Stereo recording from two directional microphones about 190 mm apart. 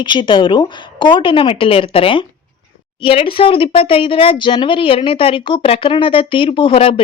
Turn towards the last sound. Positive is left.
turn(degrees=30)  # may be behind; listen again after turning